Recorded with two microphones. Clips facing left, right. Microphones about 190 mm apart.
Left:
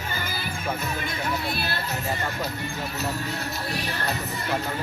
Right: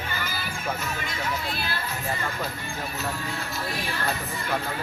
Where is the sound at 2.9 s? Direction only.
40° left (ahead or behind).